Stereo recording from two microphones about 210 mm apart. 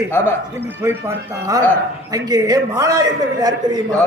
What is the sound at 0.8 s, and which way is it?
A man's voice, 10° right (ahead or behind).